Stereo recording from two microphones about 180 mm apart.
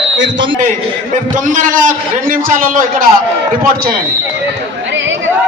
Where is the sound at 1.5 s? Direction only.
45° right (ahead or behind).